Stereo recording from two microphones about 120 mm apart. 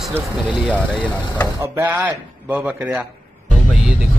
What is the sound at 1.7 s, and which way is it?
Speech, 20° right (ahead or behind).